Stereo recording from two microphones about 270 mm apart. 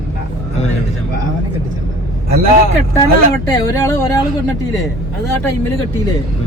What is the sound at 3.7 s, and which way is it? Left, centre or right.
Speech, centre.